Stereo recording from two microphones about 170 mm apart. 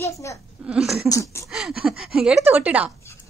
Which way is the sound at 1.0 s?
20° left (ahead or behind).